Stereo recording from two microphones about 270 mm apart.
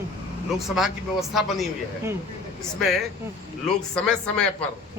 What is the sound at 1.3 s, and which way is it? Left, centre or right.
A man's voice, centre.